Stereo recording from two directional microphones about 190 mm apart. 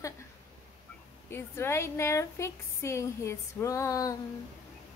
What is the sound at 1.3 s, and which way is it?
A woman's voice, 15° left (ahead or behind).